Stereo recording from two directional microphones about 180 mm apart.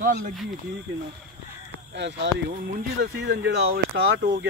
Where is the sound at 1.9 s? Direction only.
75° right (ahead or behind).